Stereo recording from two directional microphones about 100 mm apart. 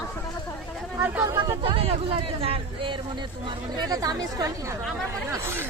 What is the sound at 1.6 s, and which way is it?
Speech, 70° right (ahead or behind).